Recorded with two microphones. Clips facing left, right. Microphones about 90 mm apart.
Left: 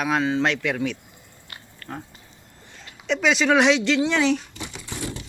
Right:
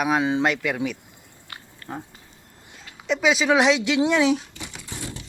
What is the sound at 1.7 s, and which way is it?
Dog, 10° right (ahead or behind).